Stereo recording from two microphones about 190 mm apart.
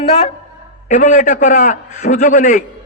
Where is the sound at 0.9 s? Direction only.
45° left (ahead or behind).